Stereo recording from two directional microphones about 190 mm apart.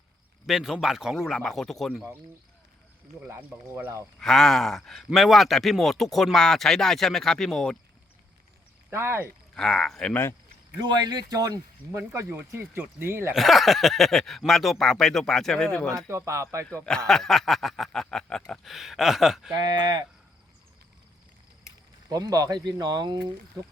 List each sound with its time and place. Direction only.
0.4 s speech: centre (ahead or behind)
3.2 s speech: 10° right (ahead or behind)
4.2 s speech: centre (ahead or behind)
8.9 s speech: 15° right (ahead or behind)
9.6 s speech: 5° left (ahead or behind)
10.8 s speech: 20° right (ahead or behind)
13.3 s speech: centre (ahead or behind)
16.0 s speech: 15° right (ahead or behind)
16.6 s speech: 5° left (ahead or behind)
19.5 s speech: 20° right (ahead or behind)
22.1 s speech: 20° right (ahead or behind)